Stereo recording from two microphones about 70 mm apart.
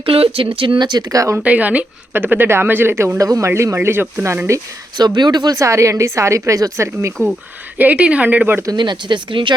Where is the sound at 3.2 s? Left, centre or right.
Right.